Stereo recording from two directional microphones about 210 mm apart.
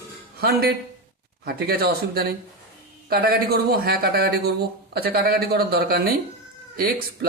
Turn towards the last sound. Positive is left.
turn(degrees=-45)  # may be behind; listen again after turning